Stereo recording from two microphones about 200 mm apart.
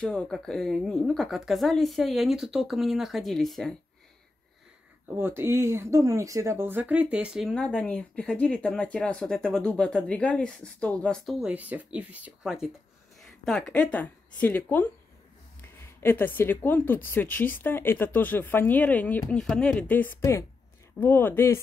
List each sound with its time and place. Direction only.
0.0 s speech: 5° left (ahead or behind)
5.1 s speech: 10° right (ahead or behind); by 21.5 s 10° left (ahead or behind)